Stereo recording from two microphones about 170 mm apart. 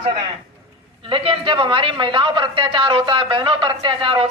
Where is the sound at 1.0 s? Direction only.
30° right (ahead or behind).